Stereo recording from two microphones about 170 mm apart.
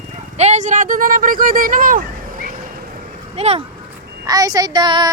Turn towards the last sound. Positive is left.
turn(degrees=-25)  # may be behind; listen again after turning